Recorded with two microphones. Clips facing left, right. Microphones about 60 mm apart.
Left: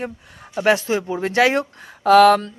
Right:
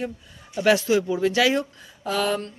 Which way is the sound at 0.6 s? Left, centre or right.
Left.